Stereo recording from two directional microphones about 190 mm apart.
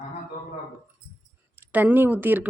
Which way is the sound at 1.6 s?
10° right (ahead or behind).